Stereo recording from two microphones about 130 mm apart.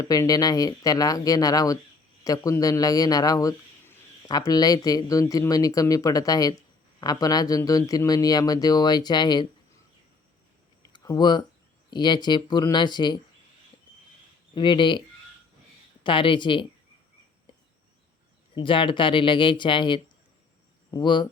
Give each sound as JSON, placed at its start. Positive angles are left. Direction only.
{"t": 0.0, "sound": "a man's voice", "side_deg": 25}
{"t": 10.9, "sound": "speech", "side_deg": 30}
{"t": 14.5, "sound": "speech", "side_deg": 40}
{"t": 16.0, "sound": "speech", "side_deg": 40}
{"t": 18.5, "sound": "speech", "side_deg": 40}